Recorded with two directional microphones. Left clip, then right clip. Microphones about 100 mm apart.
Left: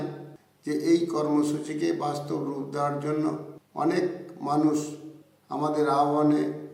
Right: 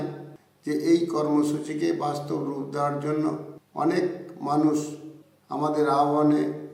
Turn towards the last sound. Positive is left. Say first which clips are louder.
# right 1 dB
turn(degrees=0)  # may be behind; listen again after turning